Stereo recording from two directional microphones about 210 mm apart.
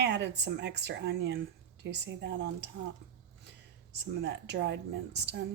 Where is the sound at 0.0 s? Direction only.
55° right (ahead or behind).